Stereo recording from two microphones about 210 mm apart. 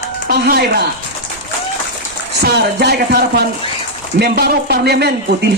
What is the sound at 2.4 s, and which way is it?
A man's voice, 50° right (ahead or behind).